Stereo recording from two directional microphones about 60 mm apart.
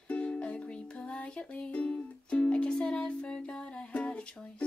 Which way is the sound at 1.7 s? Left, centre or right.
Centre.